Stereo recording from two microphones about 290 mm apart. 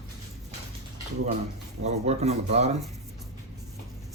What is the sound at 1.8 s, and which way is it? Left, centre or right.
Speech, right.